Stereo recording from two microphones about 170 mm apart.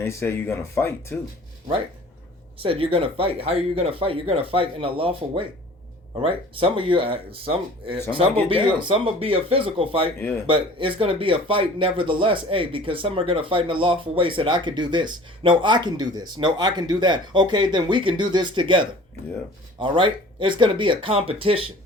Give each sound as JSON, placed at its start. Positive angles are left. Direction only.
{"t": 0.0, "sound": "speech", "side_deg": 15}
{"t": 2.6, "sound": "speech", "side_deg": -35}
{"t": 10.2, "sound": "speech", "side_deg": 15}
{"t": 10.4, "sound": "speech", "side_deg": -30}